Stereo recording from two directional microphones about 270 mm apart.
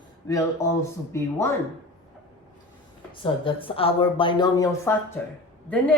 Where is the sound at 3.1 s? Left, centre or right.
Centre.